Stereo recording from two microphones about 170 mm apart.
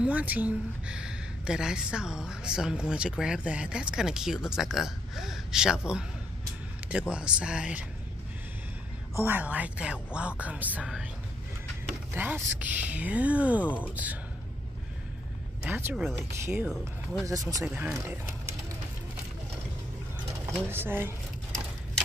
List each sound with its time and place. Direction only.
0.0 s a woman's voice: 10° right (ahead or behind)
9.2 s speech: 10° right (ahead or behind)
12.1 s speech: 10° right (ahead or behind)
15.6 s a woman's voice: 10° right (ahead or behind)
17.3 s speech: 20° right (ahead or behind)
17.6 s a woman's voice: 5° right (ahead or behind)
20.6 s speech: 15° right (ahead or behind)